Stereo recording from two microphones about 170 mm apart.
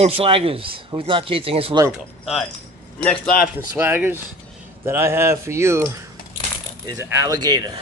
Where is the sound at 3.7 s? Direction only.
10° right (ahead or behind).